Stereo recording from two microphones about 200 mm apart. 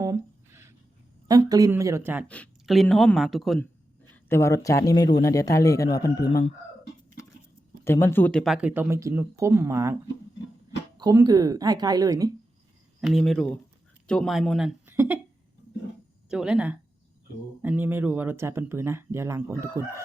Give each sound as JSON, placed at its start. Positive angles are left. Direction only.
{"t": 0.0, "sound": "a sound", "side_deg": -15}
{"t": 1.3, "sound": "speech", "side_deg": -20}
{"t": 2.2, "sound": "speech", "side_deg": 5}
{"t": 4.3, "sound": "a man's voice", "side_deg": 15}
{"t": 7.9, "sound": "speech", "side_deg": 10}
{"t": 13.0, "sound": "speech", "side_deg": 0}
{"t": 16.3, "sound": "speech", "side_deg": -5}